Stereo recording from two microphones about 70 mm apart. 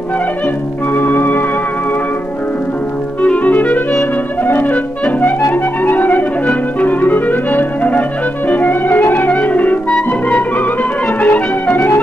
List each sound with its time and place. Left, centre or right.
0.9 s music: left
3.2 s clarinet: left
4.5 s music: left
5.0 s clarinet: left
8.5 s music: left